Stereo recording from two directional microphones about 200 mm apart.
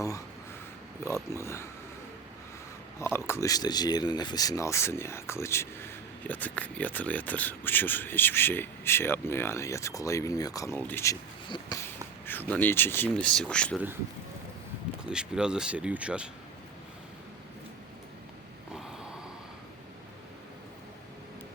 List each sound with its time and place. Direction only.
1.1 s speech: 15° left (ahead or behind)
3.2 s speech: 15° left (ahead or behind)
15.0 s speech: 5° right (ahead or behind)